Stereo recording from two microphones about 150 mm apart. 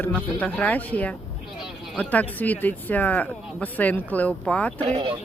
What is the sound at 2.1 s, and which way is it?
Speech, 10° left (ahead or behind).